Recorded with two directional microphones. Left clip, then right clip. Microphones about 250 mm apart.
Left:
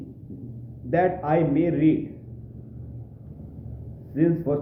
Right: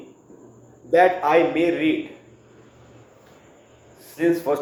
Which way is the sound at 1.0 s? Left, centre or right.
Centre.